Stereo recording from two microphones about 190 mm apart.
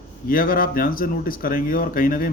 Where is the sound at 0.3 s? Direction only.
50° left (ahead or behind).